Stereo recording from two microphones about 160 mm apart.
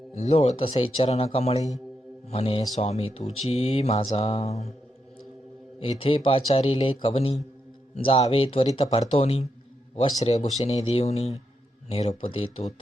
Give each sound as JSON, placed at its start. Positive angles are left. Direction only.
{"t": 0.1, "sound": "a man's voice", "side_deg": 45}
{"t": 5.8, "sound": "a man's voice", "side_deg": 35}